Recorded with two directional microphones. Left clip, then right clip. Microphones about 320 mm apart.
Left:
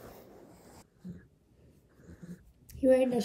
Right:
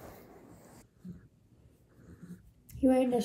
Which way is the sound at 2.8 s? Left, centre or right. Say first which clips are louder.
Left 2 dB; left.